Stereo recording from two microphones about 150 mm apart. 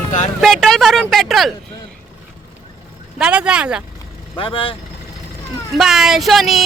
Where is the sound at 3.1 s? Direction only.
5° right (ahead or behind).